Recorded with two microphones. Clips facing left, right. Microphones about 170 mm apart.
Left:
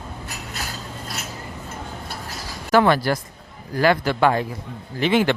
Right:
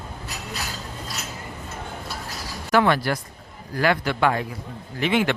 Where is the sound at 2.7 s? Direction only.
35° left (ahead or behind).